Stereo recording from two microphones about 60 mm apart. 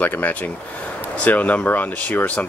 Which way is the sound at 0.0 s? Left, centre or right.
Left.